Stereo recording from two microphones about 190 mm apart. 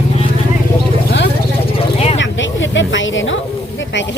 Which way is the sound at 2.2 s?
75° left (ahead or behind).